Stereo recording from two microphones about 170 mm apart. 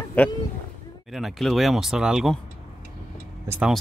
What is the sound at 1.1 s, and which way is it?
Speech, centre (ahead or behind).